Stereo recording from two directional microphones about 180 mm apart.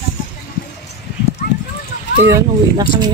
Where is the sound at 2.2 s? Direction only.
15° right (ahead or behind).